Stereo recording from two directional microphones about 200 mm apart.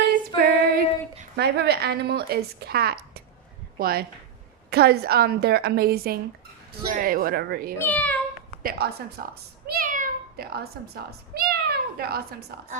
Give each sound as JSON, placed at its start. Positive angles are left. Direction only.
{"t": 0.3, "sound": "female singing", "side_deg": -50}
{"t": 1.4, "sound": "a woman's voice", "side_deg": -55}
{"t": 7.8, "sound": "speech", "side_deg": 10}
{"t": 8.6, "sound": "a child's voice", "side_deg": -50}